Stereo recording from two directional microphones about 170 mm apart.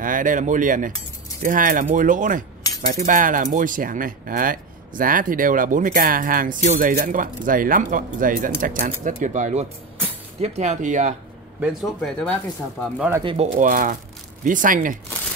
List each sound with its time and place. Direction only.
0.0 s speech: 50° right (ahead or behind)
11.6 s speech: centre (ahead or behind)
13.2 s speech: 30° right (ahead or behind)
13.6 s speech: 50° right (ahead or behind)